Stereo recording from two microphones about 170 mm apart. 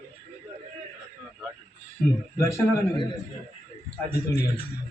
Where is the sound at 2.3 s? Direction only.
15° left (ahead or behind).